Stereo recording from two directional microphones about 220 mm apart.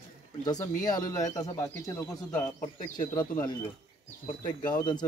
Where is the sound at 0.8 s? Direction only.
15° left (ahead or behind).